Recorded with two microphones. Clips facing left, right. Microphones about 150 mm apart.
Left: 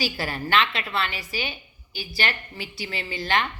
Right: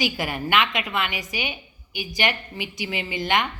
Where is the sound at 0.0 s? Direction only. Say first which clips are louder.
Right 2 dB; 15° right (ahead or behind).